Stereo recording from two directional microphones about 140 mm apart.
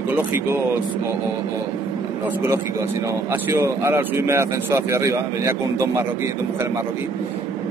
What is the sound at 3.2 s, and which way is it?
Speech, 15° right (ahead or behind).